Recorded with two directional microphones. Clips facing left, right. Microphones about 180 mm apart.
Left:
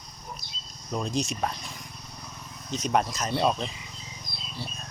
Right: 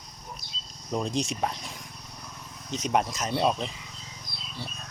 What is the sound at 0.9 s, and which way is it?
Speech, 15° right (ahead or behind).